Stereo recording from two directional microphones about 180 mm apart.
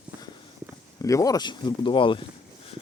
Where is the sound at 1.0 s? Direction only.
20° left (ahead or behind).